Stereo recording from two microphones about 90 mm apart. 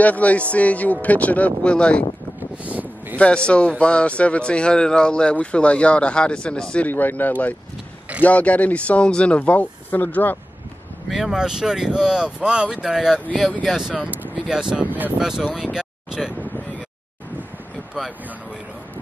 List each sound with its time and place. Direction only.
0.0 s speech: 15° left (ahead or behind)
2.5 s a sound: 15° right (ahead or behind)
3.2 s speech: 10° left (ahead or behind)
11.1 s speech: 5° right (ahead or behind)
14.0 s vehicle: 20° right (ahead or behind)
14.5 s speech: 5° right (ahead or behind)
15.5 s a sound: 10° right (ahead or behind)